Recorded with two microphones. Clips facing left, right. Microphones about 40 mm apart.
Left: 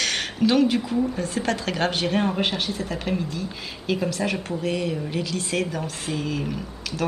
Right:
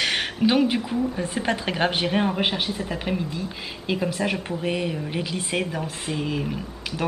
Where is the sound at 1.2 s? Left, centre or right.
Centre.